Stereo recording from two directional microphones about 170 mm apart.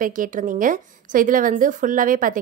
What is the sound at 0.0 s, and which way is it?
A woman's voice, 50° right (ahead or behind).